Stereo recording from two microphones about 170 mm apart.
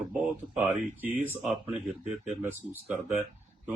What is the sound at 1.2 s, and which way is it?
Speech, 10° right (ahead or behind).